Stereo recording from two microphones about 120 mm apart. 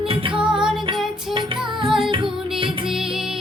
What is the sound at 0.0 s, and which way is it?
Music, 50° right (ahead or behind).